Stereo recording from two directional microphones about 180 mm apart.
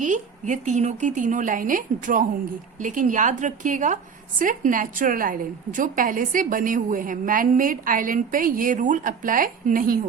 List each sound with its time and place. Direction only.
0.0 s a woman's voice: 45° right (ahead or behind)